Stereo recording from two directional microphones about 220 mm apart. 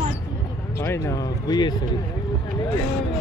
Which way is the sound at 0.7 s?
15° left (ahead or behind).